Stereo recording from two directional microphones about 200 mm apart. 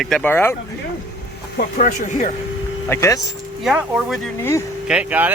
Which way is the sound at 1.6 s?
40° left (ahead or behind).